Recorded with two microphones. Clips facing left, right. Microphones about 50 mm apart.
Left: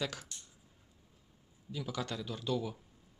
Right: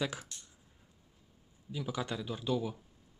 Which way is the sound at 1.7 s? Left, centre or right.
Centre.